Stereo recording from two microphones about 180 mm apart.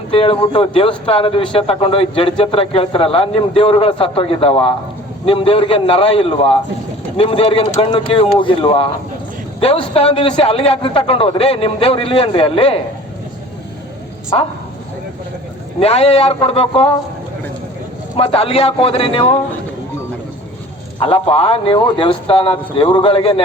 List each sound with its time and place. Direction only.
0.1 s a man's voice: 30° left (ahead or behind)
14.3 s a man's voice: 30° left (ahead or behind)
15.8 s a man's voice: 35° left (ahead or behind)
18.2 s a man's voice: 30° left (ahead or behind)
21.0 s speech: 30° left (ahead or behind)